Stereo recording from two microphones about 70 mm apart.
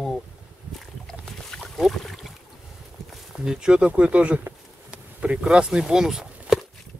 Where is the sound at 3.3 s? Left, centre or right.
Centre.